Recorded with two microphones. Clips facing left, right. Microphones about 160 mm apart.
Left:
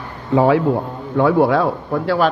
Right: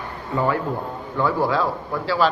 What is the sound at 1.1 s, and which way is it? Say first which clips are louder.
Speech: left 7 dB; 70° left (ahead or behind).